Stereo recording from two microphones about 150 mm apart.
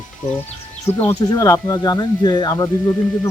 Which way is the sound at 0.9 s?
45° left (ahead or behind).